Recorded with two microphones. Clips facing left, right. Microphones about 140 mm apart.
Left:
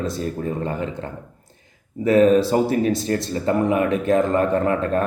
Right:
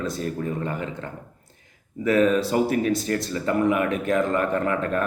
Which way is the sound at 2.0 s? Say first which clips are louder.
Left 5 dB; 35° left (ahead or behind).